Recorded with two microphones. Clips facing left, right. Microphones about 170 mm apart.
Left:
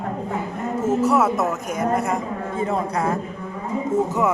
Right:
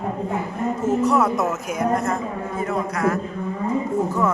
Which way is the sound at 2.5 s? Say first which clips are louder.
Left 2 dB; 30° left (ahead or behind).